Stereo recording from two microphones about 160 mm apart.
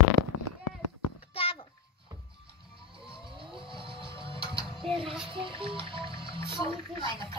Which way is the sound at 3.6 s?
30° right (ahead or behind).